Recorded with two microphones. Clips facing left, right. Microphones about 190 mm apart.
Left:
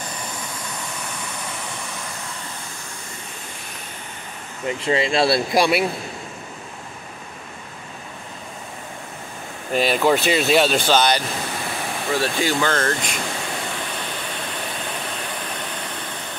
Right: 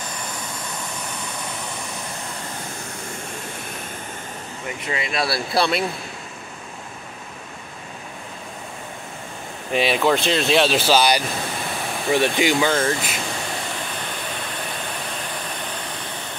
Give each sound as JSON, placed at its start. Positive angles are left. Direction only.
{"t": 4.6, "sound": "speech", "side_deg": 30}
{"t": 5.5, "sound": "speech", "side_deg": 10}
{"t": 9.7, "sound": "speech", "side_deg": 0}